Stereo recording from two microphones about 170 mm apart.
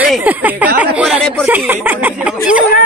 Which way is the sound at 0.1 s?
10° right (ahead or behind).